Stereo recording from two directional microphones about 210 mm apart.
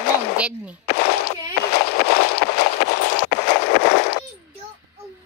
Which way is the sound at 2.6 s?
90° left.